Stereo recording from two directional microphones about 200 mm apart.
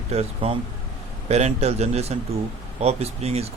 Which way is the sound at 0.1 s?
30° right (ahead or behind).